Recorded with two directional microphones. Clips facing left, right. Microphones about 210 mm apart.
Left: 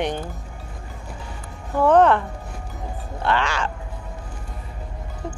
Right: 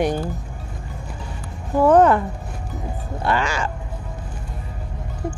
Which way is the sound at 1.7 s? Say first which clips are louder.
Right 2 dB; 10° right (ahead or behind).